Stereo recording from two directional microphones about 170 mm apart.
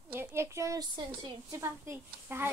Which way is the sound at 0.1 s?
15° right (ahead or behind).